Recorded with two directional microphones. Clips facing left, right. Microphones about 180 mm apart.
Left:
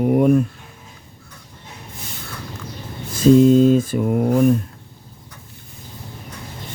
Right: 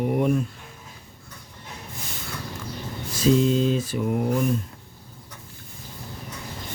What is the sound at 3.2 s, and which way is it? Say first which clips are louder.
Mantra: left 9 dB; 45° left (ahead or behind).